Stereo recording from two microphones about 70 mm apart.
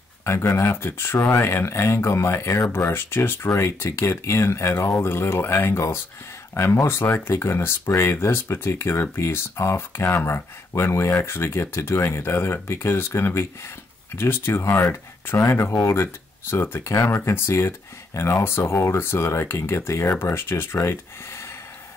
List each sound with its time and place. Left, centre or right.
0.2 s speech: left